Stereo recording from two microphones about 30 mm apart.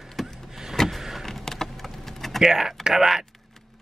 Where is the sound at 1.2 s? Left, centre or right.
Centre.